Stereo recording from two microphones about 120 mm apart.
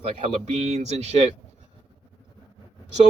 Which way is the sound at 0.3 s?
65° right (ahead or behind).